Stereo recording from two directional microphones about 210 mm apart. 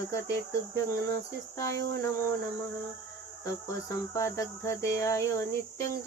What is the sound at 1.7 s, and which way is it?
Cricket, 55° right (ahead or behind).